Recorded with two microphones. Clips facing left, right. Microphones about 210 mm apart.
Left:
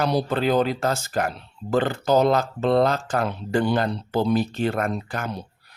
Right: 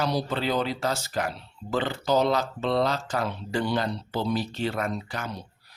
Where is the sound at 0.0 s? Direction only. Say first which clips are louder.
Left 5 dB; 55° left (ahead or behind).